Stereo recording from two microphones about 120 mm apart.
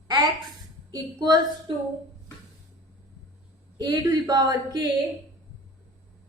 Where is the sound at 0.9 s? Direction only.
35° right (ahead or behind).